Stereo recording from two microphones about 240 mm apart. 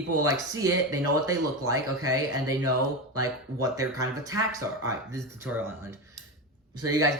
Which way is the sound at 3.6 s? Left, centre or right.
Centre.